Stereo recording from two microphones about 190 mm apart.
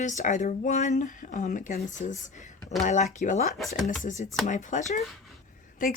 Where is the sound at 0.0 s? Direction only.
40° left (ahead or behind).